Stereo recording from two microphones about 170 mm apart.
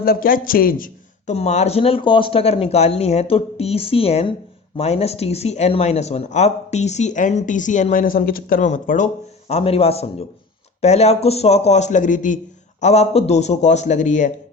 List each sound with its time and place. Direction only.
0.0 s speech: 55° left (ahead or behind)
1.3 s speech: 40° left (ahead or behind)